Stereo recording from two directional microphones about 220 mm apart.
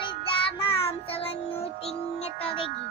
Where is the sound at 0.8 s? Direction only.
25° left (ahead or behind).